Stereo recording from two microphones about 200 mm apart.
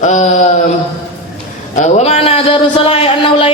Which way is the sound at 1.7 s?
30° left (ahead or behind).